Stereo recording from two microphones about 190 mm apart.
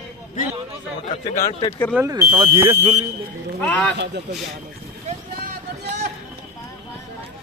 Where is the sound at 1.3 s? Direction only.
30° left (ahead or behind).